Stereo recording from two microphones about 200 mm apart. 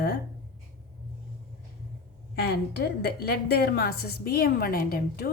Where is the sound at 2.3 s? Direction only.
55° left (ahead or behind).